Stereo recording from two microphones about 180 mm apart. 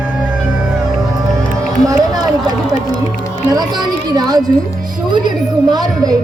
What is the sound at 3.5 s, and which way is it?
Speech, 25° right (ahead or behind).